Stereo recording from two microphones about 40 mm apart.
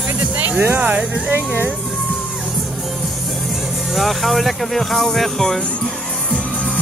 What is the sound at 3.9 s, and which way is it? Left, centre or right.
Speech, centre.